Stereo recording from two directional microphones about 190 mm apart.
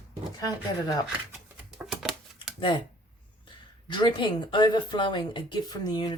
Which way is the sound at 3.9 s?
25° left (ahead or behind).